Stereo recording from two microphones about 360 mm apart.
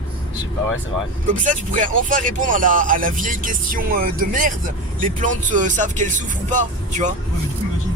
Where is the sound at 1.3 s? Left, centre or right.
Right.